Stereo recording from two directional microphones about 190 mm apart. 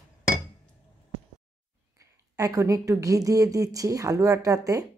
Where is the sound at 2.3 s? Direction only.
15° right (ahead or behind).